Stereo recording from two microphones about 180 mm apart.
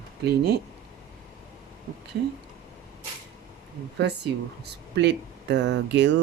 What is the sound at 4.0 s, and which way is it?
Speech, 70° right (ahead or behind).